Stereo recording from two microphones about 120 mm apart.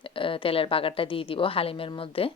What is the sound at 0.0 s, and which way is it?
A woman's voice, 45° left (ahead or behind).